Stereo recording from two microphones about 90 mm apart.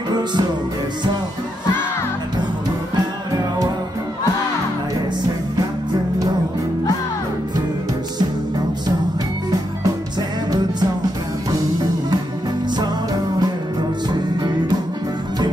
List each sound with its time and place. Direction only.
0.1 s music: 55° right (ahead or behind)
12.7 s music: 50° right (ahead or behind)